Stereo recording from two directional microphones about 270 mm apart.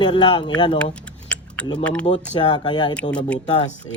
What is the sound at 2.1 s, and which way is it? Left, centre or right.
Speech, centre.